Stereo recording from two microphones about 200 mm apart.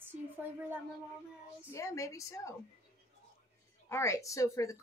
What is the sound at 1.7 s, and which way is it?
Speech, 15° left (ahead or behind).